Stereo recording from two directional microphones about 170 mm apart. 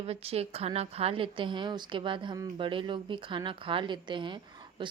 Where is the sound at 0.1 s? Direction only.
35° right (ahead or behind).